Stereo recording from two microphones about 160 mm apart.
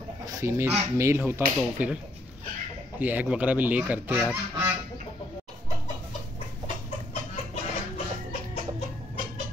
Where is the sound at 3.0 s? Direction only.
10° right (ahead or behind).